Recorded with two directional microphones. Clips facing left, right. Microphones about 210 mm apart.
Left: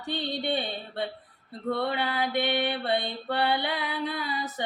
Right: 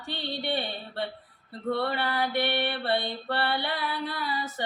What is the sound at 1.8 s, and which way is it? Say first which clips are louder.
Female singing: left 1 dB; 15° left (ahead or behind).